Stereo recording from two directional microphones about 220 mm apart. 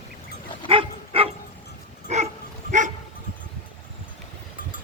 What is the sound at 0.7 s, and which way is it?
Dog, 25° right (ahead or behind).